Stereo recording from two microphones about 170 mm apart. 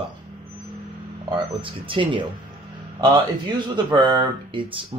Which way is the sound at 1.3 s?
30° right (ahead or behind).